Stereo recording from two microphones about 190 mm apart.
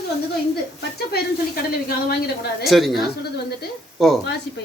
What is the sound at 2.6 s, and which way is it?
A woman's voice, centre (ahead or behind).